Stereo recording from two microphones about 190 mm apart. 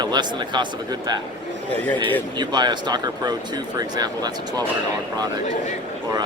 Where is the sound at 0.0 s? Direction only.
25° right (ahead or behind).